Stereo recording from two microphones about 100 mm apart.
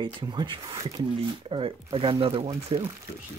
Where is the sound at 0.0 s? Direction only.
50° right (ahead or behind).